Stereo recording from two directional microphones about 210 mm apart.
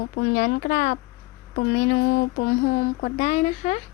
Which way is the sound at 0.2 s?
45° left (ahead or behind).